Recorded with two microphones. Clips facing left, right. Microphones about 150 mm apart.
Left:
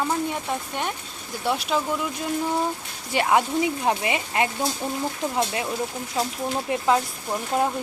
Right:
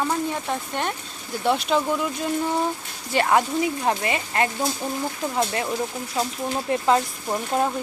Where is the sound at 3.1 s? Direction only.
10° left (ahead or behind).